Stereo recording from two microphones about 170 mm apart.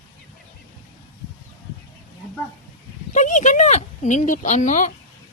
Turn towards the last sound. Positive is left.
turn(degrees=45)  # may be behind; listen again after turning